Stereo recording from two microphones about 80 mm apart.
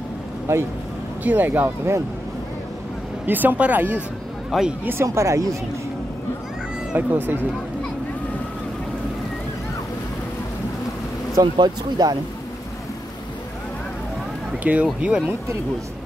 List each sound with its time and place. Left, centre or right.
0.5 s speech: right
1.2 s speech: right
3.3 s speech: right
4.5 s speech: centre
5.0 s speech: right
6.9 s speech: right
11.5 s speech: right
14.6 s speech: centre